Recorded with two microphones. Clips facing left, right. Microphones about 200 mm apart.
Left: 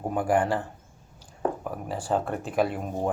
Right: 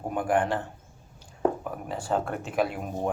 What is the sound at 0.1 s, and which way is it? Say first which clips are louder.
Speech: left 1 dB; 5° left (ahead or behind).